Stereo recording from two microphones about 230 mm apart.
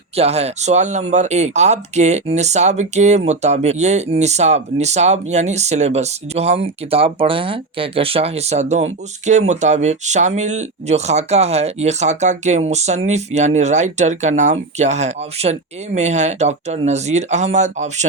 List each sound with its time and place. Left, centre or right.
0.2 s speech: right